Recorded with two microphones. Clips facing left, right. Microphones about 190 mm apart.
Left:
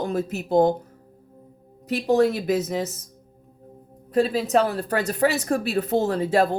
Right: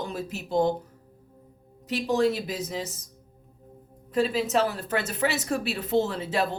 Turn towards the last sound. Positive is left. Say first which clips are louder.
# left 5 dB
turn(degrees=40)  # may be behind; listen again after turning